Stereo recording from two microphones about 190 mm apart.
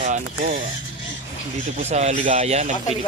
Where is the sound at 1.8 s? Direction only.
35° right (ahead or behind).